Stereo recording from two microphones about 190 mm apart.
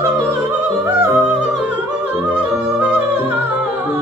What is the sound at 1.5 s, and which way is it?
Music, 5° right (ahead or behind).